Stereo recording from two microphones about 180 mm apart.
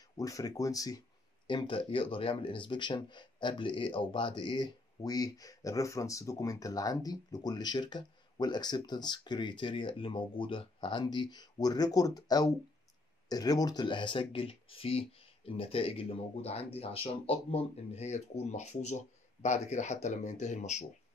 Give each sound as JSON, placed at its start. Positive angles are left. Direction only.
{"t": 0.2, "sound": "speech", "side_deg": 20}